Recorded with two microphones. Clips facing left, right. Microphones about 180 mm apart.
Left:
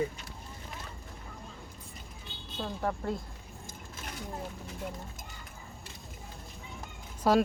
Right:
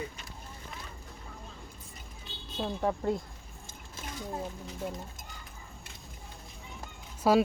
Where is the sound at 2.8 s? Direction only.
15° right (ahead or behind).